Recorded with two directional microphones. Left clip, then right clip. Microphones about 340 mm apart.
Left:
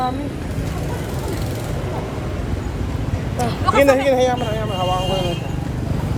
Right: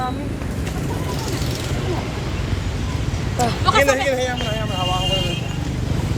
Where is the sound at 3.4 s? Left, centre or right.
Centre.